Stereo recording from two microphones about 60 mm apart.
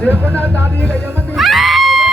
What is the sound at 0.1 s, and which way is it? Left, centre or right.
Speech, right.